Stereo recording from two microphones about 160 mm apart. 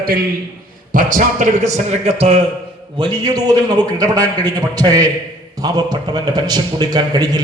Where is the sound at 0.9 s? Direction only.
55° right (ahead or behind); by 2.4 s 35° right (ahead or behind).